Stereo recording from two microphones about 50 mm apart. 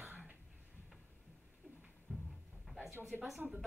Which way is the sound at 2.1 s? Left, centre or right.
Right.